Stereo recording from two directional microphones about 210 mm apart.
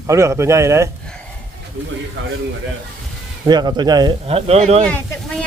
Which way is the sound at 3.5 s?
20° right (ahead or behind).